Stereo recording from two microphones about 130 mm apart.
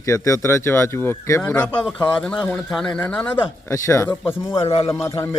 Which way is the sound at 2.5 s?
5° left (ahead or behind).